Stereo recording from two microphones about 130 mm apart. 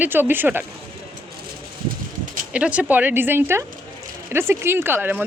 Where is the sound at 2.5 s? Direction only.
10° right (ahead or behind).